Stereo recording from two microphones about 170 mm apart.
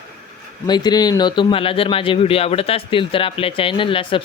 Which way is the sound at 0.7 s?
25° left (ahead or behind).